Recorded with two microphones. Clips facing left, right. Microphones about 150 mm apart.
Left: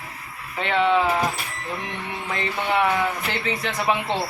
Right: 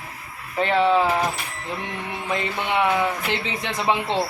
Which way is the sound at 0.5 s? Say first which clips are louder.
Right 2 dB; 35° right (ahead or behind).